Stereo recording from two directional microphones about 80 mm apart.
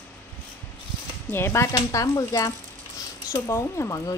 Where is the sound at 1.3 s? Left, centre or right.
Left.